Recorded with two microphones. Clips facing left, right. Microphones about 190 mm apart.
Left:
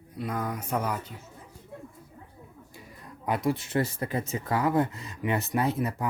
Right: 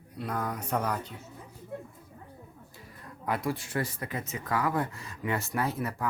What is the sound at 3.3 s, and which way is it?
Speech, 20° left (ahead or behind).